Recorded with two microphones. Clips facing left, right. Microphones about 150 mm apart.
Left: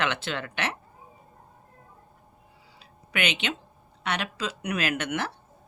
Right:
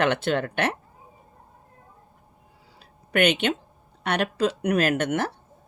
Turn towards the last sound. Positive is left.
turn(degrees=-45)  # may be behind; listen again after turning